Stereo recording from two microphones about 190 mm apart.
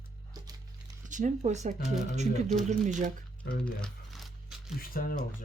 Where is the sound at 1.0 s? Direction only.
40° right (ahead or behind).